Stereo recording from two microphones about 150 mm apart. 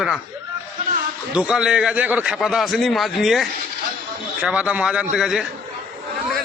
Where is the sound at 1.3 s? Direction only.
5° right (ahead or behind).